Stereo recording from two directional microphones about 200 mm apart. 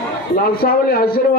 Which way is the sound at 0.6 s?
50° left (ahead or behind).